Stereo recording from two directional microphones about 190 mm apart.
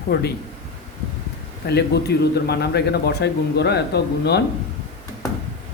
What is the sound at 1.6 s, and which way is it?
Speech, 60° left (ahead or behind).